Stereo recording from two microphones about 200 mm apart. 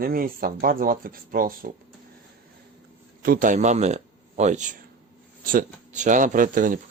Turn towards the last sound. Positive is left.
turn(degrees=-45)  # may be behind; listen again after turning